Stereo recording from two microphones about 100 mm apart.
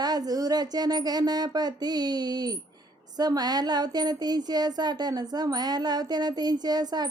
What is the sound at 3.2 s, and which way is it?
Speech, 45° right (ahead or behind).